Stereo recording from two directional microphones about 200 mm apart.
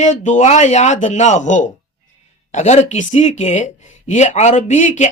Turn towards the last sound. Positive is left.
turn(degrees=40)  # may be behind; listen again after turning